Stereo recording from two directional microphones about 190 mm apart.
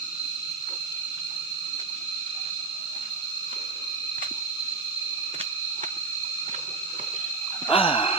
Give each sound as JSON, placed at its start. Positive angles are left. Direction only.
{"t": 7.7, "sound": "sigh", "side_deg": 30}